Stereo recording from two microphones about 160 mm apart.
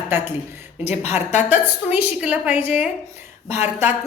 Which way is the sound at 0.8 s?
40° left (ahead or behind).